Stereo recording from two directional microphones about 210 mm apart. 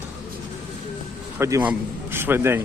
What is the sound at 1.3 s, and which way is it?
A man's voice, 15° right (ahead or behind).